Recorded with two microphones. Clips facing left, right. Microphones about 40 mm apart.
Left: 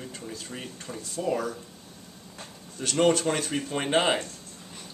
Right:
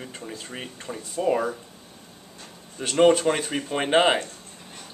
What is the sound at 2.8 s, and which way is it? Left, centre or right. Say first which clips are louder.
Speech: right 5 dB; centre.